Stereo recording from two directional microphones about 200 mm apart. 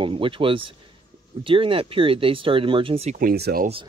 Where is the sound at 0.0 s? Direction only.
25° right (ahead or behind).